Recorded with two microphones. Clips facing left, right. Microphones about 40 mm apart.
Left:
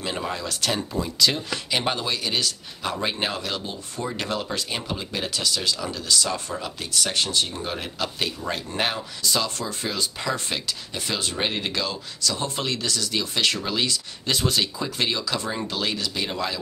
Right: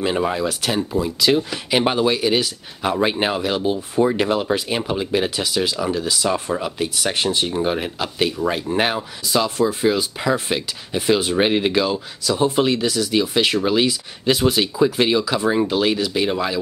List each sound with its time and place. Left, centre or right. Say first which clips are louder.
0.0 s speech: right 9 dB; right